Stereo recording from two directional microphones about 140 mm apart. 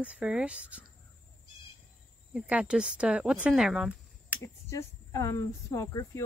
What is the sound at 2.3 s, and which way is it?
Speech, 10° right (ahead or behind).